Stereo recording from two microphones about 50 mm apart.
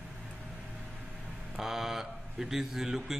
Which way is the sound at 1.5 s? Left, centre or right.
Centre.